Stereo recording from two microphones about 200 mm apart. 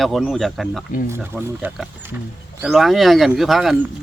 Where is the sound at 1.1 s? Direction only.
10° right (ahead or behind).